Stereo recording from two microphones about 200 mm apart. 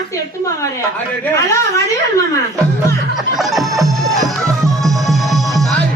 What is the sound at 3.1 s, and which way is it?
Snicker, centre (ahead or behind).